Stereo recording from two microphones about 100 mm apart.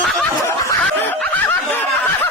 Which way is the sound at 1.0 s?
20° left (ahead or behind).